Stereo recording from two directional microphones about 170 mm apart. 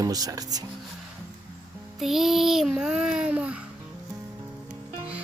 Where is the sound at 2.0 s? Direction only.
Centre (ahead or behind).